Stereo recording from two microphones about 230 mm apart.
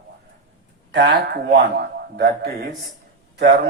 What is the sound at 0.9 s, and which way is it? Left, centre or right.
A man's voice, right.